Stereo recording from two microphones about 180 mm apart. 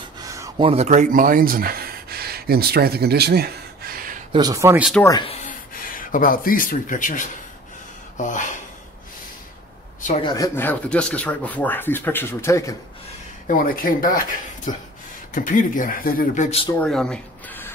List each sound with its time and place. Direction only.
0.2 s a sound: 20° right (ahead or behind)
0.6 s speech: 35° right (ahead or behind); by 4.2 s 55° right (ahead or behind)
4.3 s speech: 20° right (ahead or behind)
5.0 s speech: 25° left (ahead or behind)
5.4 s speech: 50° left (ahead or behind)
10.2 s a man's voice: 20° left (ahead or behind)
13.5 s speech: 50° left (ahead or behind)
16.4 s speech: 30° left (ahead or behind)
16.8 s a sound: 5° left (ahead or behind)